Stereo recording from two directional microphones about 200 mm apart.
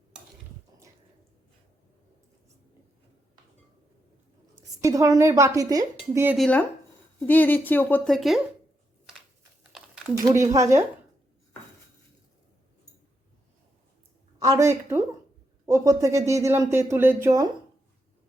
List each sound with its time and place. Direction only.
4.8 s speech: 15° right (ahead or behind)
6.3 s a woman's voice: 5° left (ahead or behind)
10.2 s speech: 15° right (ahead or behind)
14.3 s speech: 20° right (ahead or behind)